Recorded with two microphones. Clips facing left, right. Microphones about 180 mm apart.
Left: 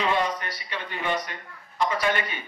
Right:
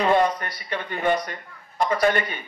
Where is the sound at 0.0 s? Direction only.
50° right (ahead or behind).